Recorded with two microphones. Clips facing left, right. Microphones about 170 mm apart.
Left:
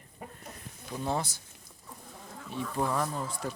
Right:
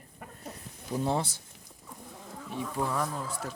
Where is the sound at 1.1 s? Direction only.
30° right (ahead or behind).